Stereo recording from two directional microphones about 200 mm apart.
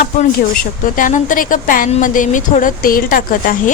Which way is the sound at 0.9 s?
40° left (ahead or behind).